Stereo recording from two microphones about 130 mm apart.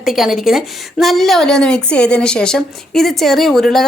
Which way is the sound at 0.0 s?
Centre (ahead or behind).